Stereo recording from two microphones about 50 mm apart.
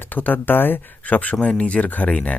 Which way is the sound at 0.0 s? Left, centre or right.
Left.